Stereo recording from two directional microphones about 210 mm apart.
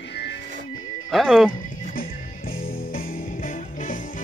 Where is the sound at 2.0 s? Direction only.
45° left (ahead or behind).